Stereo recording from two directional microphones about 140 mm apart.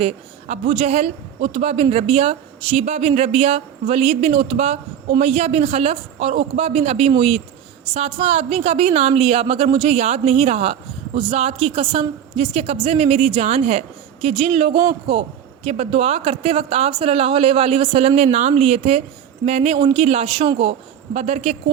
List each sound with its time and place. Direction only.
0.0 s a man's voice: 55° right (ahead or behind)